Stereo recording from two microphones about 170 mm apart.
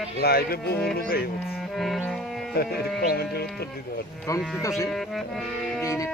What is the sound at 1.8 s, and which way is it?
Music, centre (ahead or behind).